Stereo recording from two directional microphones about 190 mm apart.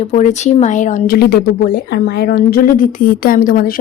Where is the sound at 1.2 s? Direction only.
55° left (ahead or behind).